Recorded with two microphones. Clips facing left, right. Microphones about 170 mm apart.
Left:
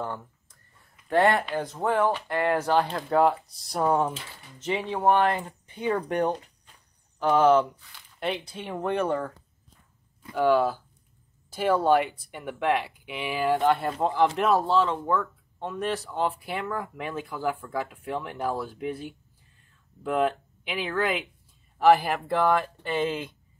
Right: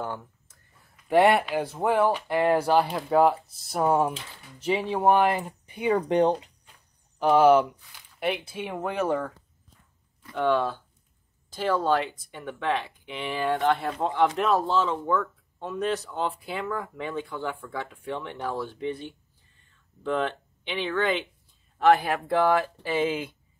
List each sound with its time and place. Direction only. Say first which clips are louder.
0.0 s a sound: even; 5° right (ahead or behind)
1.0 s speech: right 2 dB; 10° right (ahead or behind)
4.6 s speech: right 3 dB; 10° right (ahead or behind)
10.3 s speech: left 2 dB; 5° left (ahead or behind)